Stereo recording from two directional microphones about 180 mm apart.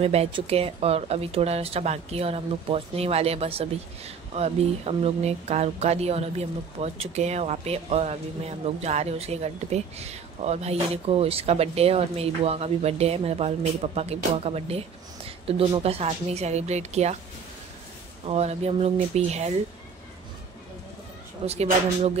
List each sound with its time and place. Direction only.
0.0 s speech: 35° right (ahead or behind)
18.2 s speech: 35° right (ahead or behind)
21.5 s speech: 35° right (ahead or behind)